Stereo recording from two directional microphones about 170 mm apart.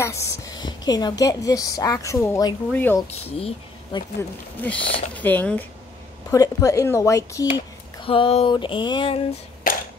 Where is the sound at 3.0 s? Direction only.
35° left (ahead or behind).